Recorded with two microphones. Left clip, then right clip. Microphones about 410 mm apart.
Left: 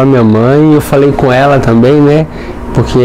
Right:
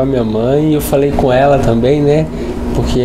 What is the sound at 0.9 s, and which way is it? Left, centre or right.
A man's voice, left.